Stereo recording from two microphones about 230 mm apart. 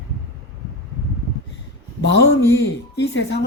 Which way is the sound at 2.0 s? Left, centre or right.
Left.